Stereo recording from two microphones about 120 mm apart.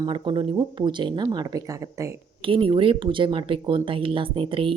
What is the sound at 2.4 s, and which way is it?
A woman's voice, 45° right (ahead or behind).